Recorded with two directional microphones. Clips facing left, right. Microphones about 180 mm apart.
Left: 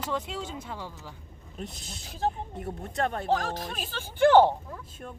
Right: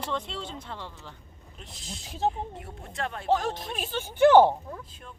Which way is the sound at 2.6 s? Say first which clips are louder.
Left 5 dB; 45° left (ahead or behind).